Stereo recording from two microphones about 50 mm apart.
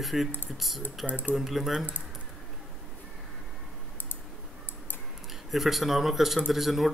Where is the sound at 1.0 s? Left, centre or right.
Left.